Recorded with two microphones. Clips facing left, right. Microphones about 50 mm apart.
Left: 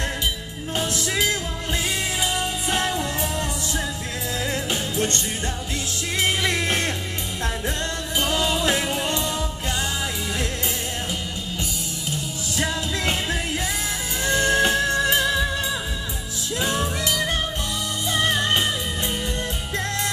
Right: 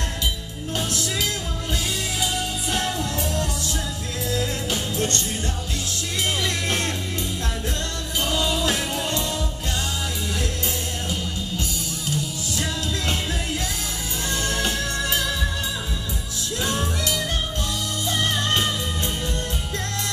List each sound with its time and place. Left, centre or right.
2.3 s music: left
6.2 s music: left
8.2 s music: left
12.5 s music: left
16.6 s music: left